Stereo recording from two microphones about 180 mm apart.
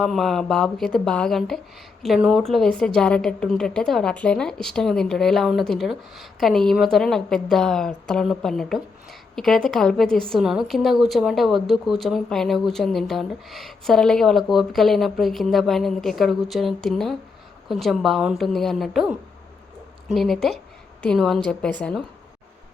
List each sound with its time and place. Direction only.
0.0 s speech: centre (ahead or behind)